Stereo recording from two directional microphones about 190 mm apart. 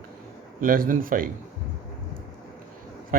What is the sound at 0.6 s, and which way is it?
Speech, 45° right (ahead or behind).